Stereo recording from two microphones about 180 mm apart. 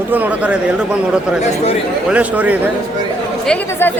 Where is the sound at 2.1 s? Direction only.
10° right (ahead or behind).